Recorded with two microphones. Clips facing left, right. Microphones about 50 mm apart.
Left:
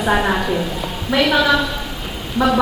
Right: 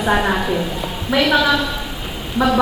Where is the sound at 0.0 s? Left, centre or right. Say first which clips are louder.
Even; centre.